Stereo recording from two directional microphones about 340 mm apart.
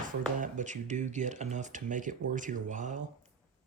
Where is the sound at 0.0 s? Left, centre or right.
Right.